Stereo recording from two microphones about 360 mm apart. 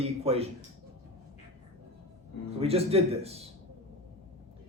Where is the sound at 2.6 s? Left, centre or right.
Centre.